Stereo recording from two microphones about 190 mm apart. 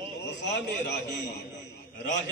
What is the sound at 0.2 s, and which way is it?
A man's voice, 65° left (ahead or behind).